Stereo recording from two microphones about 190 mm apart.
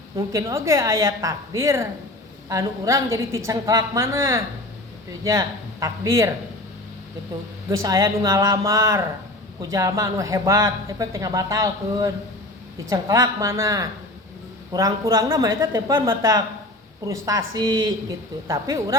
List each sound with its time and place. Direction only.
0.2 s speech: 15° right (ahead or behind)
7.7 s a woman's voice: 15° right (ahead or behind)